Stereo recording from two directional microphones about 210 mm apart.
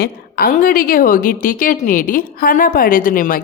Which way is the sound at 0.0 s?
45° left (ahead or behind).